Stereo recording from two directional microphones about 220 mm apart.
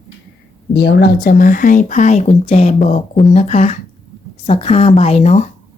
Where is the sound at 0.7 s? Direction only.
50° left (ahead or behind).